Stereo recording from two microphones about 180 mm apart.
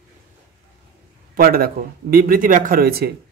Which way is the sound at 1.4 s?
55° right (ahead or behind).